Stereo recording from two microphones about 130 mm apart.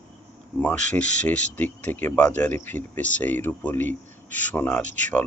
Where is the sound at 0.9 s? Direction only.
10° left (ahead or behind).